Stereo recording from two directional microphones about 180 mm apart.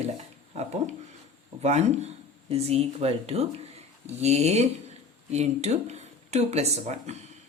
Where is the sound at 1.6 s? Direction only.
40° right (ahead or behind).